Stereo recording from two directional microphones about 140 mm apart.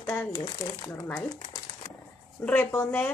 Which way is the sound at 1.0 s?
25° left (ahead or behind).